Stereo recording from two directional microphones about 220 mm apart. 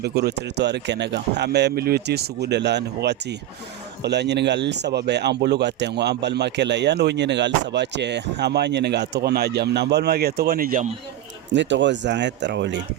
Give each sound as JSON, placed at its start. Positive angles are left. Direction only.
{"t": 0.0, "sound": "speech", "side_deg": -50}
{"t": 11.5, "sound": "speech", "side_deg": -55}